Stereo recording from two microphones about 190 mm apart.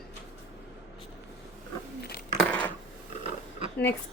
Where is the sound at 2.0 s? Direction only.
55° left (ahead or behind).